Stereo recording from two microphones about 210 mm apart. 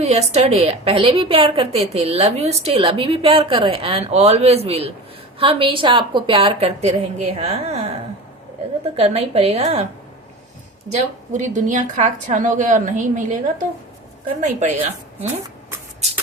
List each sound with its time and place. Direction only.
0.0 s a woman's voice: 30° right (ahead or behind)
9.0 s a woman's voice: 30° right (ahead or behind)
10.9 s a woman's voice: 35° right (ahead or behind)